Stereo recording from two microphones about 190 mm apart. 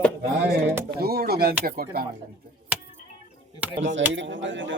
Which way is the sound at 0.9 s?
55° right (ahead or behind).